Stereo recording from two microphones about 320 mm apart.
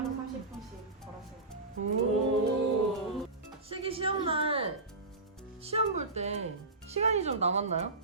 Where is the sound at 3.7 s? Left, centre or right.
Centre.